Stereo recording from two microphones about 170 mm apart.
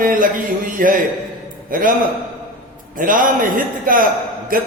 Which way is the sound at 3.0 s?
55° right (ahead or behind).